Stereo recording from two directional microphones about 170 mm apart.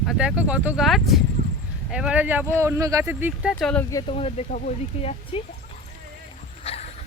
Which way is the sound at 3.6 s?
5° left (ahead or behind).